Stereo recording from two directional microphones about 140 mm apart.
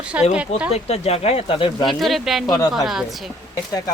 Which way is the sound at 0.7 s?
50° left (ahead or behind).